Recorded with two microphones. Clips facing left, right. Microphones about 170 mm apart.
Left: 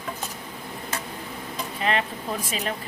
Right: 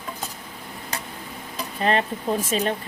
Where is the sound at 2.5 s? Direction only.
35° right (ahead or behind).